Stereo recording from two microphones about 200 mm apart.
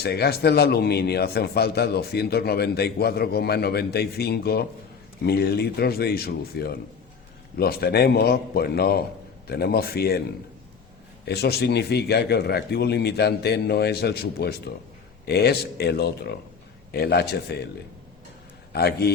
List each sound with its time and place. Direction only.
0.0 s a man's voice: 50° left (ahead or behind)
11.3 s a man's voice: 55° left (ahead or behind)
18.7 s a man's voice: 55° left (ahead or behind)